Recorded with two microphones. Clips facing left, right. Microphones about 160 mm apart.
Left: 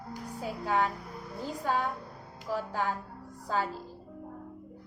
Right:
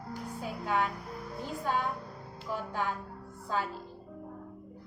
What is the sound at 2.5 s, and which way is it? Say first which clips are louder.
A woman's voice: left 2 dB; 40° left (ahead or behind).